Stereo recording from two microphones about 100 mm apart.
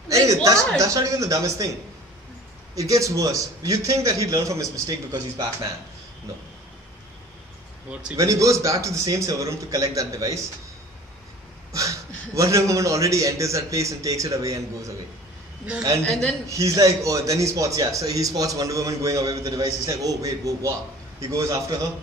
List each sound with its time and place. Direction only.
0.1 s a sound: 35° right (ahead or behind)
0.7 s a man's voice: 35° right (ahead or behind)
2.7 s a man's voice: 35° right (ahead or behind)
8.2 s a man's voice: 35° right (ahead or behind)
11.7 s a man's voice: 35° right (ahead or behind)
16.0 s speech: 10° left (ahead or behind)
16.4 s a man's voice: 30° right (ahead or behind)